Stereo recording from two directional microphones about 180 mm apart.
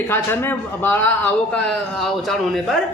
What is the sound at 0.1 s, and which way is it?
Speech, 10° left (ahead or behind).